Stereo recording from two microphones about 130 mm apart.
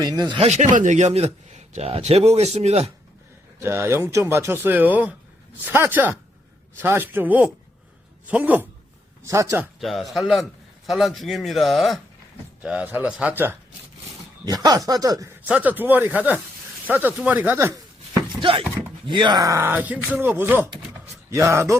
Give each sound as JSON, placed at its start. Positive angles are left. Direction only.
{"t": 0.0, "sound": "speech", "side_deg": -30}
{"t": 0.4, "sound": "speech", "side_deg": -65}
{"t": 3.6, "sound": "speech", "side_deg": -20}
{"t": 9.2, "sound": "speech", "side_deg": -25}
{"t": 9.8, "sound": "a man's voice", "side_deg": 0}
{"t": 12.6, "sound": "speech", "side_deg": -10}
{"t": 14.4, "sound": "speech", "side_deg": -30}
{"t": 15.4, "sound": "speech", "side_deg": -10}
{"t": 19.0, "sound": "speech", "side_deg": -40}